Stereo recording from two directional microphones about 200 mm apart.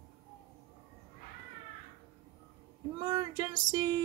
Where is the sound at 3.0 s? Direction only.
20° right (ahead or behind).